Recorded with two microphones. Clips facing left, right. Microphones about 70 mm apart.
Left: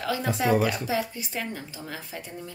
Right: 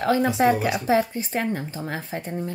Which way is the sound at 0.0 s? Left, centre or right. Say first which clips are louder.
Right 7 dB; right.